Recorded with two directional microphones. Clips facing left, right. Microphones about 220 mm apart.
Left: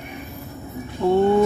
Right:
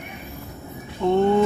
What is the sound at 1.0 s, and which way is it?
Speech, 5° left (ahead or behind).